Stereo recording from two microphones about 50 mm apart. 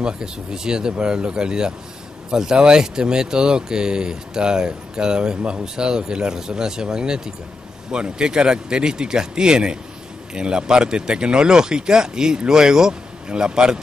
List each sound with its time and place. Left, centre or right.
0.0 s speech: centre